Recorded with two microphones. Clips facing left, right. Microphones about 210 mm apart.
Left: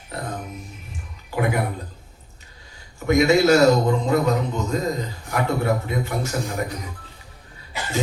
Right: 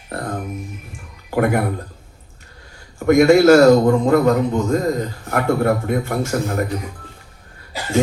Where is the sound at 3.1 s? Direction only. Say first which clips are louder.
Right 6 dB; 50° right (ahead or behind).